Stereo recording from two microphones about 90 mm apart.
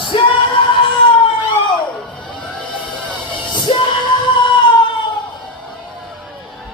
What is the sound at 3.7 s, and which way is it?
Music, 90° left.